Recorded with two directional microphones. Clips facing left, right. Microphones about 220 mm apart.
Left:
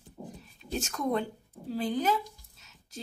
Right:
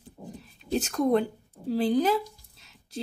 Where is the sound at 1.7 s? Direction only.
35° right (ahead or behind).